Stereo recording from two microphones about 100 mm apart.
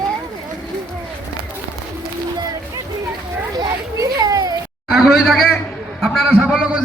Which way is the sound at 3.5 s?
35° right (ahead or behind).